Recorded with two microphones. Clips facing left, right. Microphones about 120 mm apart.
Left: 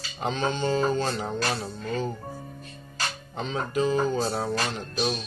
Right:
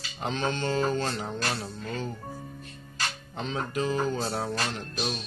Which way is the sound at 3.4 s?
Centre (ahead or behind).